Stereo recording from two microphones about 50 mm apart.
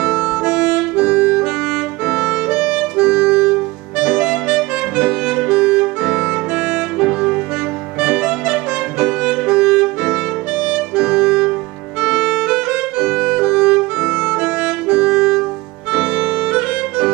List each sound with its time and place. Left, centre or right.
0.0 s harmonica: centre
2.0 s music: centre
4.0 s clarinet: centre
4.9 s music: right
15.9 s music: right